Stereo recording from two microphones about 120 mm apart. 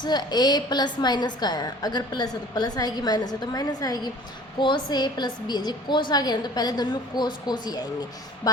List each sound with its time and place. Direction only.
0.0 s a woman's voice: 35° left (ahead or behind)